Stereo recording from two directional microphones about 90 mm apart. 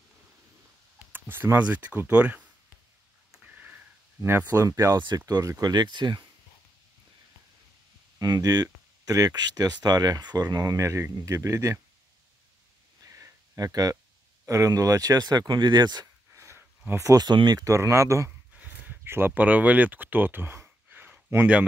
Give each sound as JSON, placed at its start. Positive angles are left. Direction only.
{"t": 1.1, "sound": "speech", "side_deg": -20}
{"t": 3.4, "sound": "sniff", "side_deg": -20}
{"t": 4.4, "sound": "speech", "side_deg": -25}
{"t": 4.6, "sound": "speech", "side_deg": -40}
{"t": 8.2, "sound": "speech", "side_deg": -45}
{"t": 13.0, "sound": "a sound", "side_deg": -35}
{"t": 14.4, "sound": "speech", "side_deg": -35}
{"t": 16.3, "sound": "a sound", "side_deg": -30}
{"t": 17.0, "sound": "speech", "side_deg": -45}
{"t": 18.5, "sound": "a sound", "side_deg": -20}